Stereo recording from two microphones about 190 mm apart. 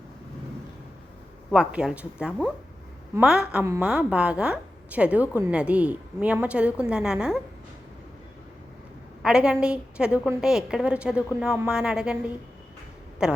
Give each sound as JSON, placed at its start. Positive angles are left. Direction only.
{"t": 1.5, "sound": "a woman's voice", "side_deg": -5}
{"t": 9.2, "sound": "a woman's voice", "side_deg": -5}